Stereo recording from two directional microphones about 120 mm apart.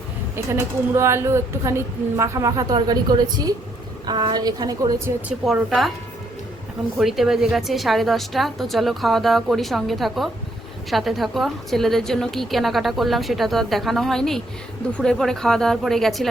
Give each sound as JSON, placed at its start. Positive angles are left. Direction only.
{"t": 0.3, "sound": "a woman's voice", "side_deg": -20}
{"t": 5.4, "sound": "a woman's voice", "side_deg": 0}
{"t": 7.0, "sound": "a woman's voice", "side_deg": 0}